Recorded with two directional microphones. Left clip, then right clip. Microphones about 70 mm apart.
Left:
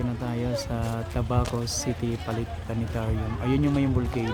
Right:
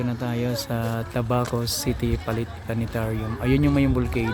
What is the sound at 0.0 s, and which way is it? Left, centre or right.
Speech, right.